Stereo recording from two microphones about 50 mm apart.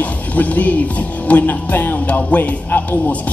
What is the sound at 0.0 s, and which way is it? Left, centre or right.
Speech, left.